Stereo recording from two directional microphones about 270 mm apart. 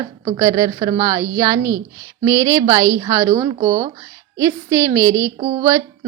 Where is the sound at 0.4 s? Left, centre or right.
Centre.